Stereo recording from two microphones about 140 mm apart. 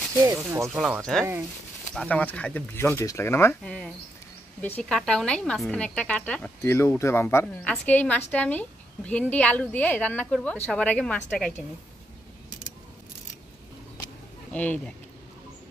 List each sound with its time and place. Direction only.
0.2 s speech: 15° right (ahead or behind)
2.0 s a woman's voice: 10° left (ahead or behind)
14.5 s speech: 10° left (ahead or behind)